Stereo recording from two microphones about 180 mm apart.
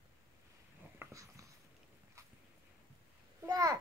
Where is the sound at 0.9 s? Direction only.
15° right (ahead or behind).